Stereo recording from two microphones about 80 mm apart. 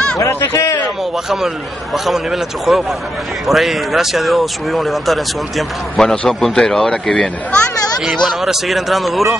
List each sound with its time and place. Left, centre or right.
0.2 s a sound: left
2.0 s speech: centre
8.0 s speech: centre